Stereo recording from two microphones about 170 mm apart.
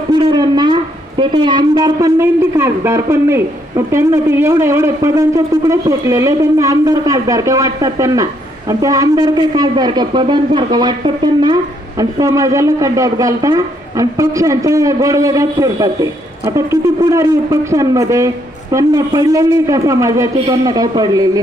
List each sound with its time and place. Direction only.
0.1 s speech: 25° right (ahead or behind)
17.1 s speech: 15° right (ahead or behind)